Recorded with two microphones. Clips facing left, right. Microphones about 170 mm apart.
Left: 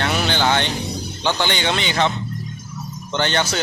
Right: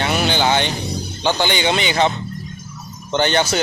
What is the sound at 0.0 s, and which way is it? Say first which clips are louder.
Music: right 2 dB; 5° right (ahead or behind).